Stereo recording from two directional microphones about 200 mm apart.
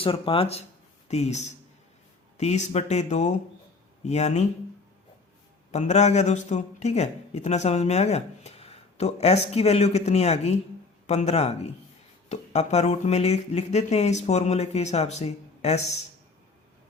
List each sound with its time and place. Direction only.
0.0 s speech: 25° left (ahead or behind)
5.7 s speech: 35° left (ahead or behind)